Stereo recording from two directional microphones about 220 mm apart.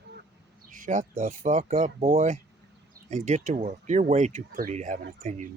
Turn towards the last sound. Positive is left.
turn(degrees=-35)  # may be behind; listen again after turning